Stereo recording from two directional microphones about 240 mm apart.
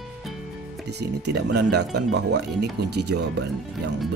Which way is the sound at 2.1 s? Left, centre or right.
Right.